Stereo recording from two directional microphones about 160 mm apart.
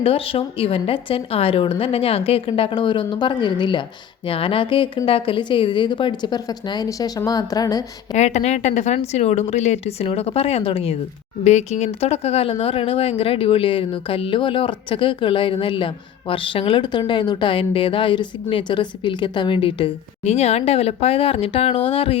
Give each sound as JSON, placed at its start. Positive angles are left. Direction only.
{"t": 0.0, "sound": "a woman's voice", "side_deg": 35}
{"t": 8.1, "sound": "speech", "side_deg": 45}